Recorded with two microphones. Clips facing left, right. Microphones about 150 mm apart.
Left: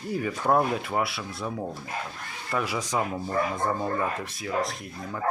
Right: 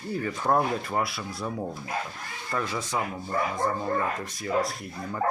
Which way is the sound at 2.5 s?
10° left (ahead or behind).